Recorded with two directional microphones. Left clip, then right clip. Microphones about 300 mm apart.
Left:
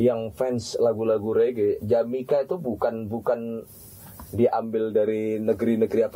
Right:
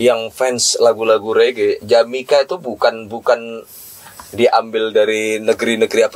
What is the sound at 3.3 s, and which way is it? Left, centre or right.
A man's voice, centre.